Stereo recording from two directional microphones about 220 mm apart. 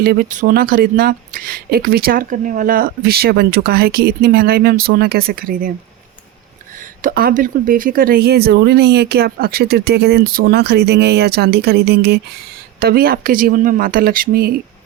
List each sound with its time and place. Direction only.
0.0 s speech: 45° right (ahead or behind)
7.0 s speech: 40° right (ahead or behind)